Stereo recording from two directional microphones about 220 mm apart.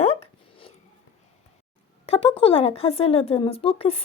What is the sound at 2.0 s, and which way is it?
A woman's voice, 25° left (ahead or behind).